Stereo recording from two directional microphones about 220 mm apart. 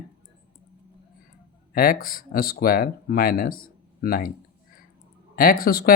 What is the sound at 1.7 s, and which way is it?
Speech, 40° left (ahead or behind).